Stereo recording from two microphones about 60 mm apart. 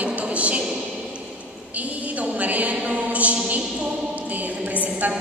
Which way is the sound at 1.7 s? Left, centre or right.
Right.